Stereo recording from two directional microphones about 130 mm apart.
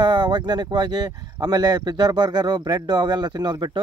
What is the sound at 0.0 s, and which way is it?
Speech, 35° right (ahead or behind).